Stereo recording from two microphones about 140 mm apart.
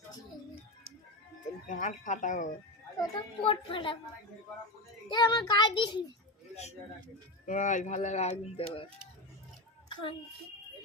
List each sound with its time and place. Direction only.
1.6 s speech: 65° left (ahead or behind)
3.0 s a woman's voice: 40° left (ahead or behind)
5.0 s a woman's voice: 35° left (ahead or behind)
7.4 s a child's voice: 65° left (ahead or behind); by 10.2 s 40° left (ahead or behind)